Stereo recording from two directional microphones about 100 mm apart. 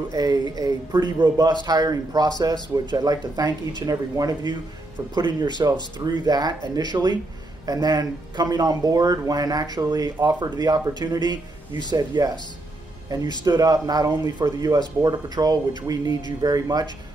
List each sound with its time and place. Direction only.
0.1 s speech: 40° right (ahead or behind)
13.4 s speech: 40° right (ahead or behind)